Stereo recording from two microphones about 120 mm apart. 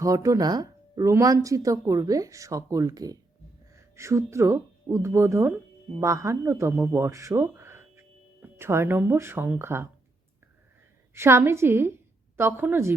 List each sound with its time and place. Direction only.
0.0 s a man's voice: 25° right (ahead or behind)
11.1 s speech: 20° right (ahead or behind)